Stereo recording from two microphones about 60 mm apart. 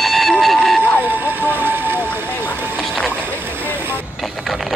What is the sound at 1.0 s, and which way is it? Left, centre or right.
Vehicle, right.